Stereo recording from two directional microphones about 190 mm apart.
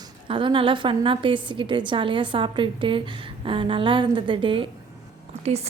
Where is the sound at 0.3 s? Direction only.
25° right (ahead or behind).